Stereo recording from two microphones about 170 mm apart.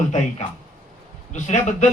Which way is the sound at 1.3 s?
45° left (ahead or behind).